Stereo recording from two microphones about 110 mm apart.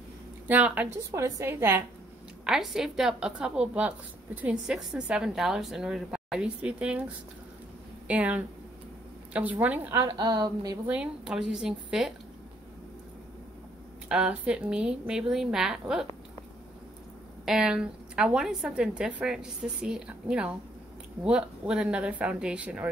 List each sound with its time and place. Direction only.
0.5 s a woman's voice: 15° right (ahead or behind)
1.1 s a woman's voice: 25° right (ahead or behind)
2.4 s a woman's voice: 5° right (ahead or behind)
8.1 s a woman's voice: 10° right (ahead or behind)
10.0 s a woman's voice: 40° right (ahead or behind)
10.9 s a woman's voice: 10° right (ahead or behind)
14.0 s a woman's voice: 10° right (ahead or behind)
17.5 s a woman's voice: 5° right (ahead or behind)